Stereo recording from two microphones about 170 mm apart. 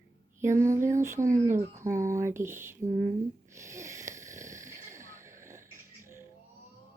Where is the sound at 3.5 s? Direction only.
15° right (ahead or behind).